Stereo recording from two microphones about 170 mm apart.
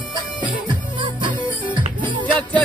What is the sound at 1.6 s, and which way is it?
Music, 10° left (ahead or behind).